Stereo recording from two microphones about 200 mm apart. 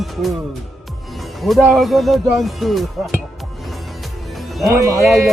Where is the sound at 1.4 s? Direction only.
Centre (ahead or behind).